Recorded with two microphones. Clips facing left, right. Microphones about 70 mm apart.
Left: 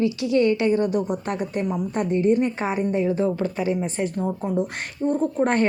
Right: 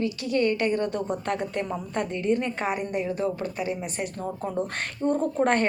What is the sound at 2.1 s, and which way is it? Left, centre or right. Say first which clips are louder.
Speech: left 7 dB; right.